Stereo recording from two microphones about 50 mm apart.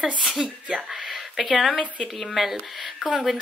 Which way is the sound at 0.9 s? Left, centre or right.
Centre.